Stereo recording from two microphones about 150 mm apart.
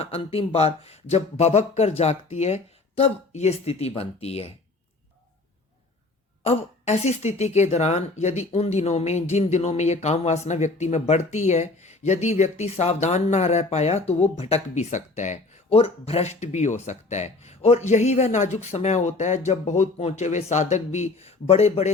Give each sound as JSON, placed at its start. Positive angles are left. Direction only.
{"t": 0.0, "sound": "speech", "side_deg": 40}
{"t": 6.4, "sound": "speech", "side_deg": 45}